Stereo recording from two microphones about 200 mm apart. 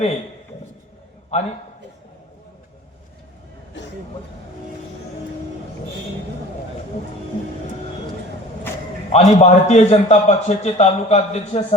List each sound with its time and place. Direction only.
1.3 s a man's voice: 35° left (ahead or behind)
9.1 s a man's voice: 35° left (ahead or behind)